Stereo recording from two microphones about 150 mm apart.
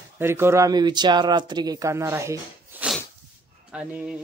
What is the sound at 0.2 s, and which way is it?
Speech, 15° right (ahead or behind).